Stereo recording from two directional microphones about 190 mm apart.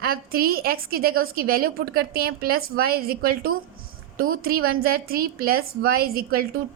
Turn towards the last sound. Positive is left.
turn(degrees=-50)  # may be behind; listen again after turning